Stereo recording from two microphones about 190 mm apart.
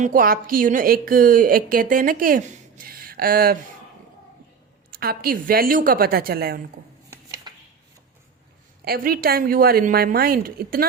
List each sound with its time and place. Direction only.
0.0 s a woman's voice: 45° right (ahead or behind)
4.9 s a woman's voice: 50° right (ahead or behind)
7.1 s dishes: 15° right (ahead or behind)
8.8 s a woman's voice: 50° right (ahead or behind)